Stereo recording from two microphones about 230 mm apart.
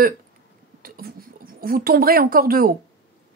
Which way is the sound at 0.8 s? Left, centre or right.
Right.